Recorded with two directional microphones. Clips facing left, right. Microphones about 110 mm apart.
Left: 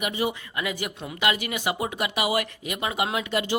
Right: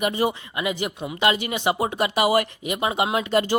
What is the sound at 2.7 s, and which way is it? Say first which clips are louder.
Speech: right 4 dB; 25° right (ahead or behind).